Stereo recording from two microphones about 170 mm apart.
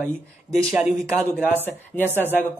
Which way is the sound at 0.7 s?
5° right (ahead or behind).